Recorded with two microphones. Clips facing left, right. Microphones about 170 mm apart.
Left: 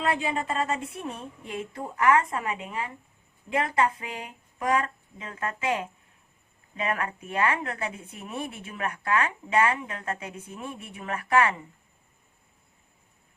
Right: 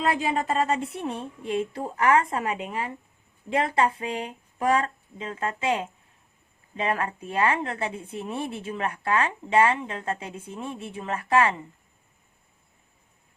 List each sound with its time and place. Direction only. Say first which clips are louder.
0.0 s a woman's voice: right 2 dB; 35° right (ahead or behind)